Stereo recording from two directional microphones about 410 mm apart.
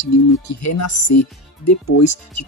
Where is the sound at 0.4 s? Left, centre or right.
Left.